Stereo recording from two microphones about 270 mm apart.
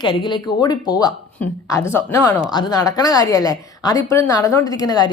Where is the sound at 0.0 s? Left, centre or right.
Centre.